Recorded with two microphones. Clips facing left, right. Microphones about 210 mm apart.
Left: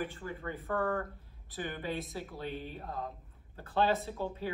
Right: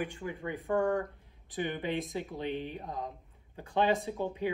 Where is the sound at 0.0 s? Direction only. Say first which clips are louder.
Right 2 dB; 15° right (ahead or behind).